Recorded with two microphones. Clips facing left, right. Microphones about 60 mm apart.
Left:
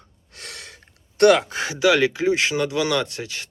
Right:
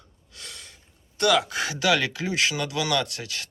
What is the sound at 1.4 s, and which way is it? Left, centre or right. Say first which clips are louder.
Speech: left 5 dB; left.